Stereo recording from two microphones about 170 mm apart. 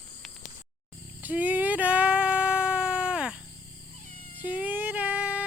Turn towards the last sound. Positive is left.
turn(degrees=-10)  # may be behind; listen again after turning